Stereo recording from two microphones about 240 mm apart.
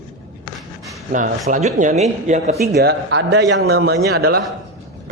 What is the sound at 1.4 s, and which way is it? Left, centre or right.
A man's voice, right.